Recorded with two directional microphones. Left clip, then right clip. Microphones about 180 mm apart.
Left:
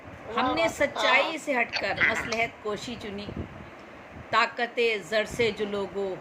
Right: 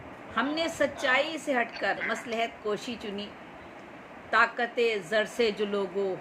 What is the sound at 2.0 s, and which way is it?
Speech, 55° left (ahead or behind).